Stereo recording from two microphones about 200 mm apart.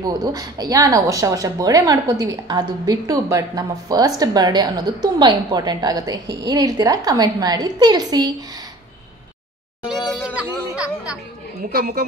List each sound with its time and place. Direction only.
0.0 s speech: 20° right (ahead or behind)
10.0 s a sound: 5° right (ahead or behind)
11.7 s a woman's voice: 50° right (ahead or behind)